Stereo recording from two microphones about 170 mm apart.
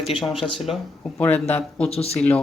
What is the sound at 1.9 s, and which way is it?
Speech, 35° left (ahead or behind).